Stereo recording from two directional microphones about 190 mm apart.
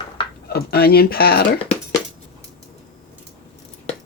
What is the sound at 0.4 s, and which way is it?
Speech, 55° left (ahead or behind).